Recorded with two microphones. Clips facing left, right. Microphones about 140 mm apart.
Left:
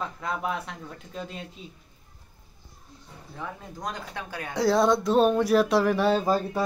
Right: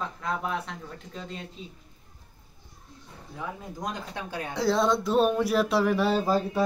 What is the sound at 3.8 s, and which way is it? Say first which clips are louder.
Speech: even; 20° right (ahead or behind).